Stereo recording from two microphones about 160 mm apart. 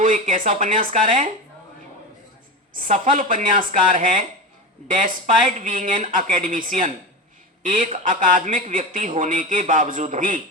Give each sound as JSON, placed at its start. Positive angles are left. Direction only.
{"t": 0.0, "sound": "speech", "side_deg": -55}
{"t": 2.7, "sound": "speech", "side_deg": -55}